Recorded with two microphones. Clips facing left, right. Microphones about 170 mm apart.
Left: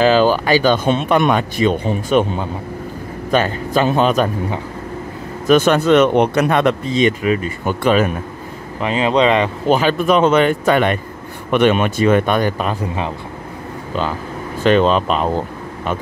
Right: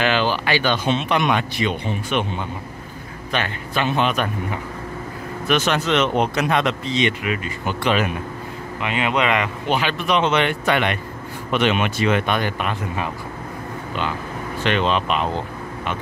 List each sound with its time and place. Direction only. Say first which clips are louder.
0.0 s speech: left 7 dB; 40° left (ahead or behind)
5.5 s speech: left 8 dB; 50° left (ahead or behind)
8.8 s speech: left 6 dB; 35° left (ahead or behind)
14.6 s speech: left 7 dB; 40° left (ahead or behind)